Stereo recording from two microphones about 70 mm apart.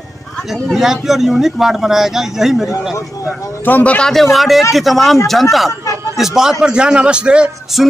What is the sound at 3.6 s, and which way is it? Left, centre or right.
Speech, left.